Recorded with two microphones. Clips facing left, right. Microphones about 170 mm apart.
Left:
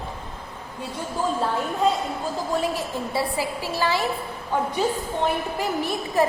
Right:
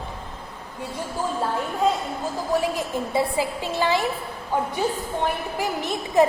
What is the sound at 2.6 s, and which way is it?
A woman's voice, 20° right (ahead or behind).